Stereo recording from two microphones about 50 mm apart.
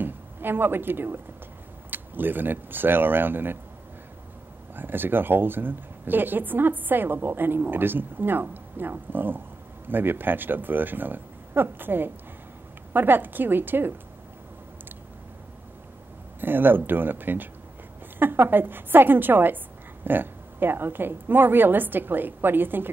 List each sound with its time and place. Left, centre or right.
0.0 s a woman's voice: right
4.7 s speech: right
16.3 s speech: right